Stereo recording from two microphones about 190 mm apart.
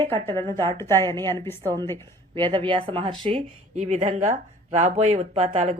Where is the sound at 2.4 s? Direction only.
25° right (ahead or behind).